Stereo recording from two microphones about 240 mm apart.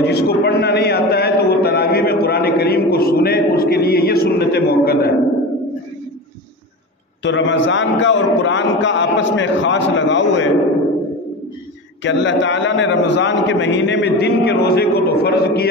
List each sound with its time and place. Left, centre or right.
0.0 s a sound: left
7.2 s a man's voice: left
12.0 s a man's voice: left